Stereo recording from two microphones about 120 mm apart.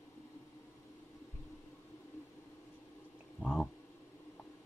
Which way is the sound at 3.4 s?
Centre (ahead or behind).